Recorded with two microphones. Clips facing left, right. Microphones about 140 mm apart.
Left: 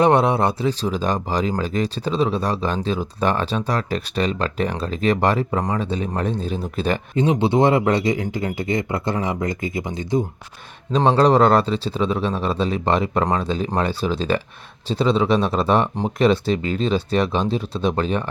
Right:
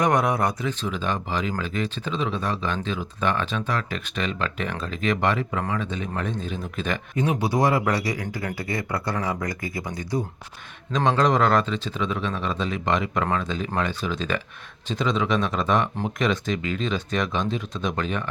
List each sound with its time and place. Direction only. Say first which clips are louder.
0.0 s speech: left 5 dB; 30° left (ahead or behind)
10.9 s speech: left 5 dB; 35° left (ahead or behind)